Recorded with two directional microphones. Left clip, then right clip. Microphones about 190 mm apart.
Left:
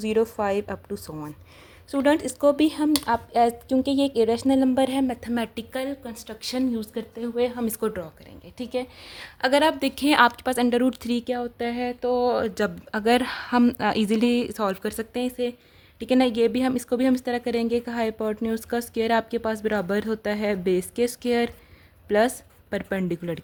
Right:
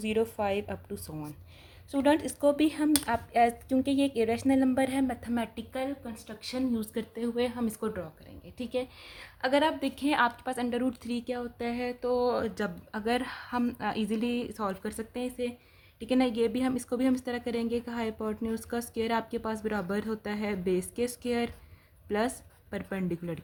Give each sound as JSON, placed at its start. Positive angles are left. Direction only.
{"t": 0.0, "sound": "a woman's voice", "side_deg": 20}
{"t": 5.5, "sound": "speech", "side_deg": 60}
{"t": 6.7, "sound": "a woman's voice", "side_deg": 20}
{"t": 7.7, "sound": "speech", "side_deg": 55}
{"t": 8.5, "sound": "speech", "side_deg": 35}
{"t": 9.1, "sound": "a woman's voice", "side_deg": 55}